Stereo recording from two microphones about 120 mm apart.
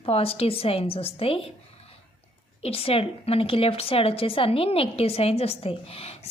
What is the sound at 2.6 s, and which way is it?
A woman's voice, 55° left (ahead or behind).